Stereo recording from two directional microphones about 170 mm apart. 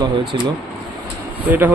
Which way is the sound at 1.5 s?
10° right (ahead or behind).